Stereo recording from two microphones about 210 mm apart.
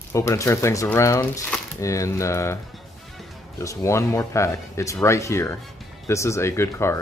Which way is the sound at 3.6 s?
15° left (ahead or behind).